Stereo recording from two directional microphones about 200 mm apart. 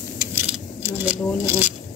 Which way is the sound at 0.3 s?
10° right (ahead or behind).